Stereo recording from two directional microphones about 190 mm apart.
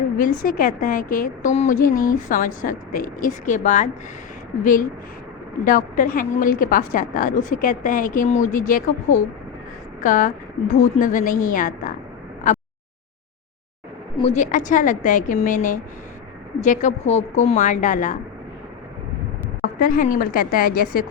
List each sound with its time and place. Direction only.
0.2 s a woman's voice: 45° left (ahead or behind)
5.6 s a woman's voice: 45° left (ahead or behind)
14.2 s a woman's voice: 35° left (ahead or behind)
19.8 s a woman's voice: 45° left (ahead or behind)